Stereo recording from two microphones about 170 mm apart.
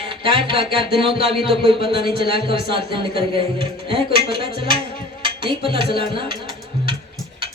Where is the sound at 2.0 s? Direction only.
65° left (ahead or behind).